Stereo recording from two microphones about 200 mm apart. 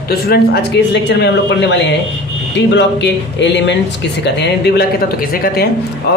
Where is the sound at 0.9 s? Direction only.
60° left (ahead or behind).